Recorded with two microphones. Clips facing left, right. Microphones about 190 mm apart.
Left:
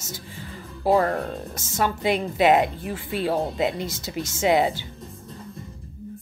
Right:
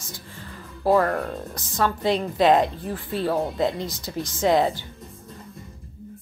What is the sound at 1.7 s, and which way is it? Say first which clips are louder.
Speech: right 1 dB; 10° left (ahead or behind).